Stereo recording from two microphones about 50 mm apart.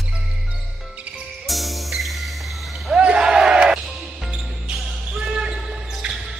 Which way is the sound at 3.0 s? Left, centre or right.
Centre.